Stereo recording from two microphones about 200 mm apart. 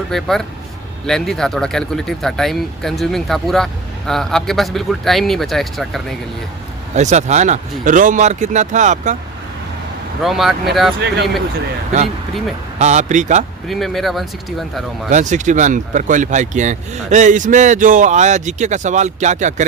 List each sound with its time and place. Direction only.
0.1 s speech: centre (ahead or behind)
6.9 s speech: 35° right (ahead or behind)
10.2 s speech: centre (ahead or behind)
12.8 s speech: 35° right (ahead or behind)
13.7 s speech: centre (ahead or behind)
15.1 s speech: 35° right (ahead or behind)